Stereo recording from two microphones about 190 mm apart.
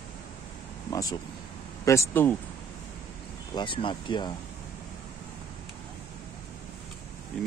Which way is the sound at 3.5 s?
25° left (ahead or behind).